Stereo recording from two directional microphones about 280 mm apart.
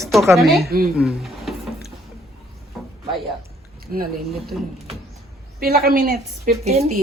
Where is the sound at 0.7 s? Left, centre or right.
Right.